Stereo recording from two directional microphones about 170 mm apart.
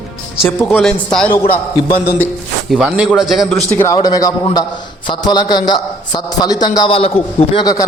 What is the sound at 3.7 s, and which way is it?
A man's voice, 15° left (ahead or behind).